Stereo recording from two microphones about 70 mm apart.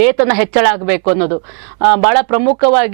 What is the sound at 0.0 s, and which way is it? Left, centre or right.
A woman's voice, centre.